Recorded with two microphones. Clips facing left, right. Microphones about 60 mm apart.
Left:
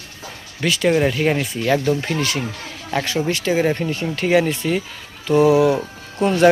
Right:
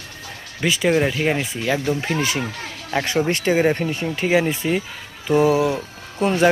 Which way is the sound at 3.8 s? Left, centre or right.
Centre.